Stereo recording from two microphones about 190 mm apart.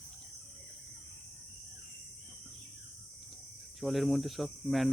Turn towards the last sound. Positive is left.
turn(degrees=0)  # may be behind; listen again after turning